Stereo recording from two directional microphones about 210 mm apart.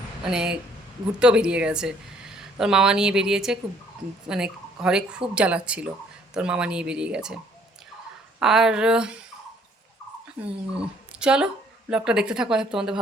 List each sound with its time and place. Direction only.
0.2 s speech: 5° right (ahead or behind)
8.4 s speech: centre (ahead or behind)
10.4 s speech: 5° right (ahead or behind)